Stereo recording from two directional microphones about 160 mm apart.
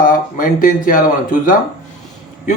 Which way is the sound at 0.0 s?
55° left (ahead or behind).